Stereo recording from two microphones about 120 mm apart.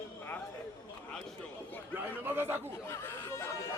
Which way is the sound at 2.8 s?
20° left (ahead or behind).